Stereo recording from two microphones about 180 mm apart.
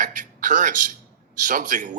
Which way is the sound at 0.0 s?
45° right (ahead or behind).